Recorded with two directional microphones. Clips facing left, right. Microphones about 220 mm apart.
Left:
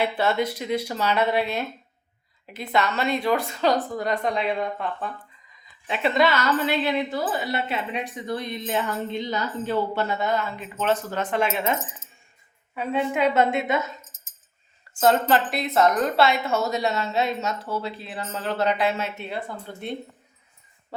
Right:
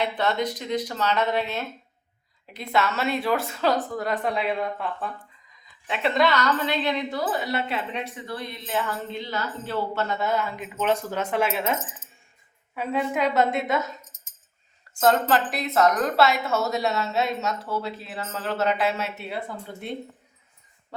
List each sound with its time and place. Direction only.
0.0 s a woman's voice: 5° left (ahead or behind)
2.5 s speech: centre (ahead or behind)
7.9 s a woman's voice: 15° left (ahead or behind)
10.2 s speech: 5° right (ahead or behind)